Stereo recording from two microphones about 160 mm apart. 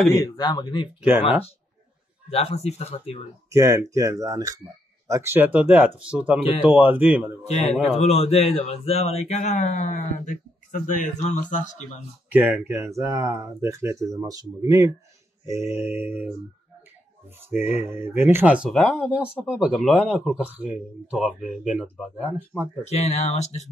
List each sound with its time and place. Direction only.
0.2 s speech: 25° left (ahead or behind)
2.2 s speech: 40° left (ahead or behind)
3.4 s speech: 20° right (ahead or behind)
7.4 s speech: 45° left (ahead or behind)
12.3 s speech: 10° right (ahead or behind)
17.5 s speech: 15° right (ahead or behind)
22.8 s speech: 45° left (ahead or behind)